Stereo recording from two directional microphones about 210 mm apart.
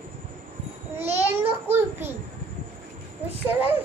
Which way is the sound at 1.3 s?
10° right (ahead or behind).